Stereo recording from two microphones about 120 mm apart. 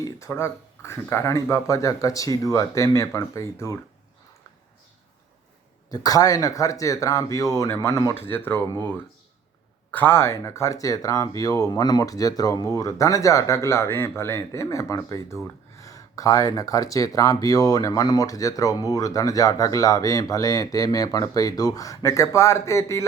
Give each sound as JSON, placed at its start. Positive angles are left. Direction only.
{"t": 0.0, "sound": "speech", "side_deg": 20}
{"t": 5.9, "sound": "speech", "side_deg": 30}